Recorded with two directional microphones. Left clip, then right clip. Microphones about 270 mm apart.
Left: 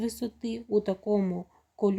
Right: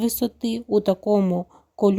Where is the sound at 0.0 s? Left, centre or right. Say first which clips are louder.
Right 9 dB; right.